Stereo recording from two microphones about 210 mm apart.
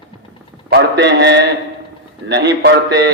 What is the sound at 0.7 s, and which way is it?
A man's voice, 55° right (ahead or behind).